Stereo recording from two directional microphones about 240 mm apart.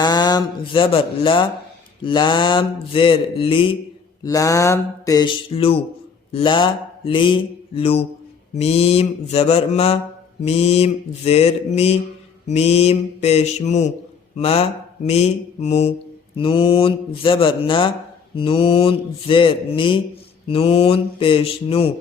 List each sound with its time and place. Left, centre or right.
0.0 s speech: centre
2.0 s mantra: left